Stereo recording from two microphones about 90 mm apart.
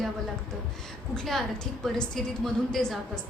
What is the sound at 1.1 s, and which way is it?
Speech, 5° left (ahead or behind).